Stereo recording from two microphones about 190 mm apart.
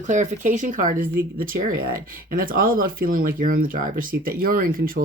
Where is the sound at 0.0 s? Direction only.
40° right (ahead or behind).